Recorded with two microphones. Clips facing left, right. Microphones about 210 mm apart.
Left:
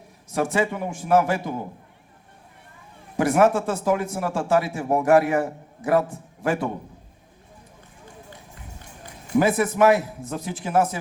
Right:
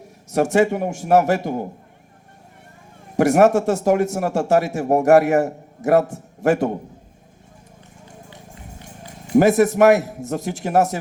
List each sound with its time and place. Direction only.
0.3 s speech: 45° right (ahead or behind)
3.2 s speech: 45° right (ahead or behind)
9.3 s speech: 45° right (ahead or behind)